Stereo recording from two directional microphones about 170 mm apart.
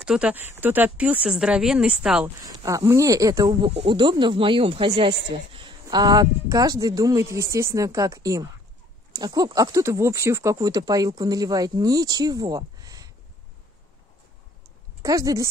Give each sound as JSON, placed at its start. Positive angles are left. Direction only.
{"t": 0.0, "sound": "speech", "side_deg": -5}
{"t": 2.4, "sound": "speech", "side_deg": -20}
{"t": 3.4, "sound": "speech", "side_deg": -30}
{"t": 15.0, "sound": "speech", "side_deg": -20}